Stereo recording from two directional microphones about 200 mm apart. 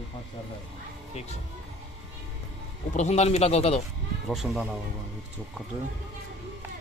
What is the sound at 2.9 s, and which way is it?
Speech, 35° left (ahead or behind).